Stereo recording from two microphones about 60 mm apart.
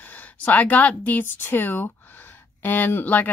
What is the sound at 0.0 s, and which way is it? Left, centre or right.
Speech, left.